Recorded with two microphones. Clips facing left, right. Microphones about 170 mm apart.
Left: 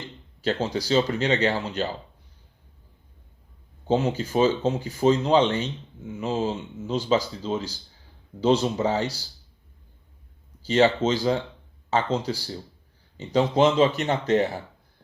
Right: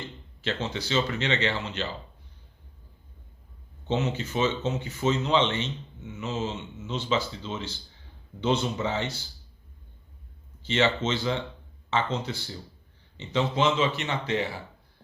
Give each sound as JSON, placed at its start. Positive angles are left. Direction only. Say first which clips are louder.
{"t": 0.4, "sound": "speech", "louder": "left 6 dB", "side_deg": 40}
{"t": 3.8, "sound": "speech", "louder": "left 5 dB", "side_deg": 35}
{"t": 10.6, "sound": "speech", "louder": "left 5 dB", "side_deg": 40}